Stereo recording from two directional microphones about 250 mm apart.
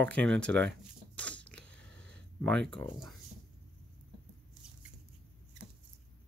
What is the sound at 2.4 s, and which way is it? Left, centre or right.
Speech, centre.